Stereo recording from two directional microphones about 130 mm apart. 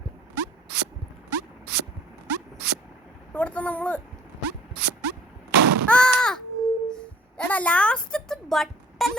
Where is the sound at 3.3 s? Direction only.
10° left (ahead or behind).